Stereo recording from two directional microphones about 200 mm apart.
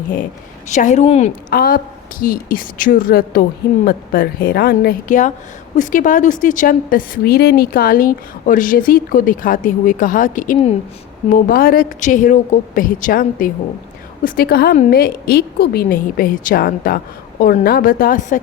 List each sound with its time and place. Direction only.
0.7 s a woman's voice: 35° left (ahead or behind)
1.5 s a woman's voice: 50° left (ahead or behind)